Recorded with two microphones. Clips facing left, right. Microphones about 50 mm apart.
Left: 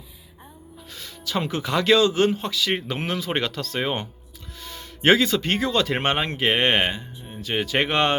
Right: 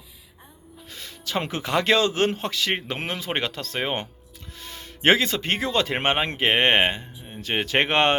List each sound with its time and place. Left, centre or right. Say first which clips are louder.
0.9 s speech: left 1 dB; right
2.8 s speech: left 2 dB; right